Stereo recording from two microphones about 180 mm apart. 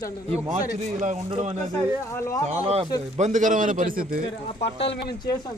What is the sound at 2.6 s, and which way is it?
A man's voice, 35° right (ahead or behind).